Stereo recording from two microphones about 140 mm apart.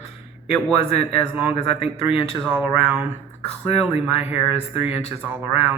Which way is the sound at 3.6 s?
45° left (ahead or behind).